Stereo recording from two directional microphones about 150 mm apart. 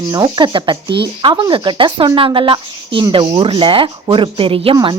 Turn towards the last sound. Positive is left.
turn(degrees=-35)  # may be behind; listen again after turning